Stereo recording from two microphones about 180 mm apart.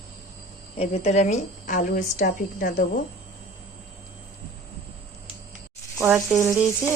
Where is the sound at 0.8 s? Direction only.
35° left (ahead or behind); by 3.0 s 55° left (ahead or behind).